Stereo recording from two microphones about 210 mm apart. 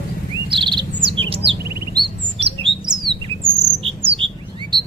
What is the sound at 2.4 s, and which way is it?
Bird, 25° right (ahead or behind).